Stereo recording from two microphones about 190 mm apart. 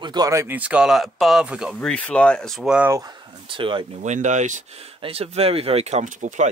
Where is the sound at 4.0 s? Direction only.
40° right (ahead or behind).